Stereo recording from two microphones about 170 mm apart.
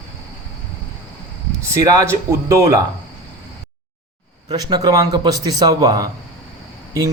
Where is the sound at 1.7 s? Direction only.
20° right (ahead or behind).